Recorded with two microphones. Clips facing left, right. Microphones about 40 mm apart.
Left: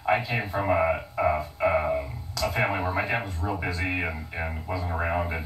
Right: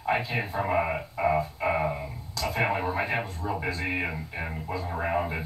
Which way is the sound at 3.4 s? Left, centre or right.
Left.